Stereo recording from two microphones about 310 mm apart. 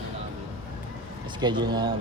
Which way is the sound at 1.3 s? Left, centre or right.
Centre.